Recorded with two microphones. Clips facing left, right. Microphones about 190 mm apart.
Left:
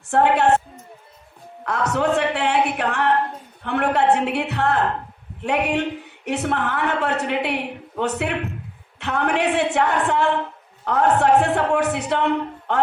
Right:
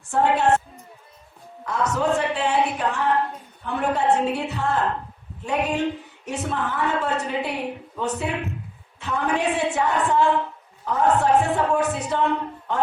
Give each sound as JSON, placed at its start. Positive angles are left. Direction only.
{"t": 0.1, "sound": "a woman's voice", "side_deg": 65}
{"t": 1.6, "sound": "a woman's voice", "side_deg": 70}